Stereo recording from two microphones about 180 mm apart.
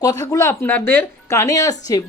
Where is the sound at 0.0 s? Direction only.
20° left (ahead or behind).